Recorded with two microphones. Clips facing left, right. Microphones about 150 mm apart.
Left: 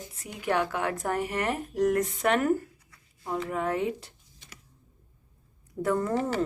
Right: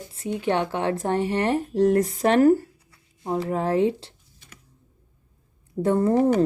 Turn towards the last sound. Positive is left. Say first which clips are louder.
# right 6 dB
turn(degrees=-25)  # may be behind; listen again after turning